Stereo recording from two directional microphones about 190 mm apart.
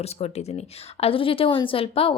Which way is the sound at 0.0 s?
35° left (ahead or behind).